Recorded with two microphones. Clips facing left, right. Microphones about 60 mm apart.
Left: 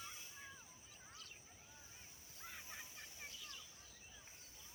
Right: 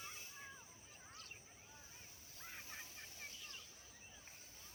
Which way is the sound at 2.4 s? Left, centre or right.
Centre.